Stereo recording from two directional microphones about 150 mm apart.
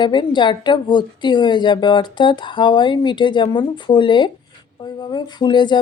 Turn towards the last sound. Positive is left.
turn(degrees=30)  # may be behind; listen again after turning